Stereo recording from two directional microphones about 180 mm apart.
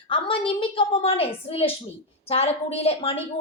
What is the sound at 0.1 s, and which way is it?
A woman's voice, 30° left (ahead or behind).